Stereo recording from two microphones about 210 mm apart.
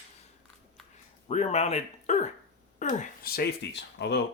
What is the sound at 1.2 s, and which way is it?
Speech, 30° left (ahead or behind).